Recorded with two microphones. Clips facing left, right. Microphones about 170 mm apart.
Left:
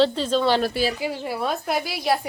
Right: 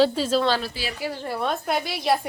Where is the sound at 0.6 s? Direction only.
50° left (ahead or behind).